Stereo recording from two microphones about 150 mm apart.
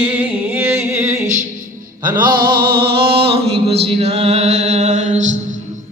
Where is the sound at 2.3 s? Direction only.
80° right.